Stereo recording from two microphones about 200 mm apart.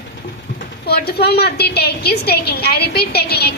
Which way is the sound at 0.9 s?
50° left (ahead or behind).